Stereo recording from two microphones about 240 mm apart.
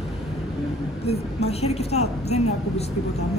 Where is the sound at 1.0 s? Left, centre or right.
Left.